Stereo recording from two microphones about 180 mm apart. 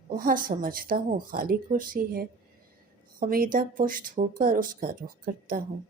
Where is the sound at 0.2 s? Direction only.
50° right (ahead or behind).